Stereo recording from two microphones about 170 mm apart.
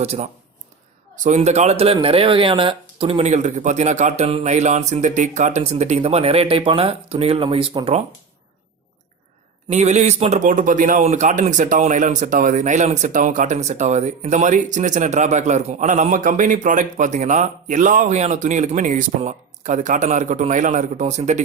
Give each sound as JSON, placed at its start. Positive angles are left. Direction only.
{"t": 0.0, "sound": "speech", "side_deg": -40}
{"t": 9.6, "sound": "a man's voice", "side_deg": -40}